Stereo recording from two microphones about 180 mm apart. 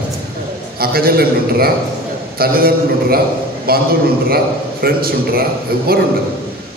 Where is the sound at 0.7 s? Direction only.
55° right (ahead or behind).